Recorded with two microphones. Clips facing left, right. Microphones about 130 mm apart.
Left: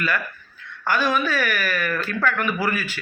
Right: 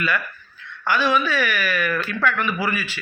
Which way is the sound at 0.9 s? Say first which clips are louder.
Right 1 dB; 45° left (ahead or behind).